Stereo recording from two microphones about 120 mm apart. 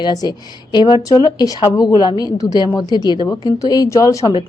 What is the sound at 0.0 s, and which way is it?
A woman's voice, 35° left (ahead or behind).